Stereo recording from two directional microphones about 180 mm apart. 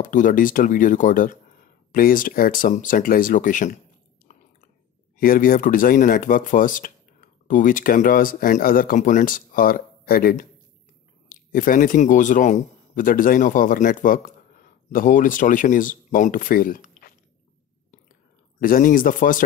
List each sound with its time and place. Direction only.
0.0 s speech: 45° left (ahead or behind)
4.3 s chewing: 45° left (ahead or behind)
5.2 s speech: 50° left (ahead or behind)
18.6 s speech: 50° left (ahead or behind)